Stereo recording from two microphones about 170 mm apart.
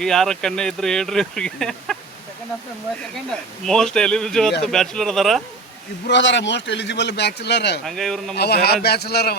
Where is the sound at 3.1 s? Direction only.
5° left (ahead or behind).